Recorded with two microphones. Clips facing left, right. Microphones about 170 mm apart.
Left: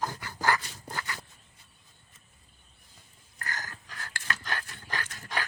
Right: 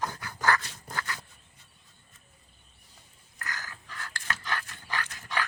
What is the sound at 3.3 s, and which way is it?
Dog, 45° left (ahead or behind).